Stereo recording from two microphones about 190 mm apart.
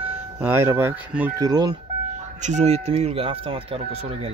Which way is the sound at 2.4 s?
35° right (ahead or behind).